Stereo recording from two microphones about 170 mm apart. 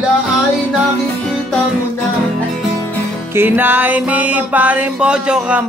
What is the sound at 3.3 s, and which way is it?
Music, 10° right (ahead or behind).